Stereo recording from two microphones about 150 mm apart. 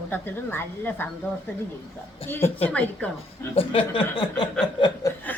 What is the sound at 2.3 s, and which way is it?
Speech, 15° left (ahead or behind).